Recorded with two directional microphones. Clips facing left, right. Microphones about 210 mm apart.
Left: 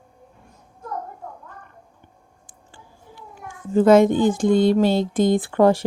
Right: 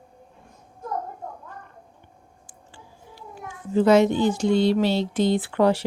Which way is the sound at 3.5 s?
50° left (ahead or behind).